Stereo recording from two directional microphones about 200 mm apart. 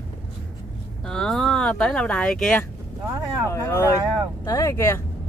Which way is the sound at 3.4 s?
15° left (ahead or behind).